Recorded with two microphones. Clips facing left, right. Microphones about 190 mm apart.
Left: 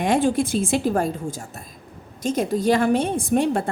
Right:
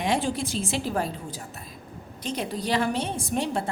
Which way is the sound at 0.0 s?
50° left (ahead or behind).